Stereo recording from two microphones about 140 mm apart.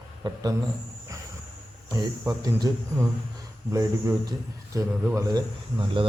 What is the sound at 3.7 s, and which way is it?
A man's voice, 25° right (ahead or behind).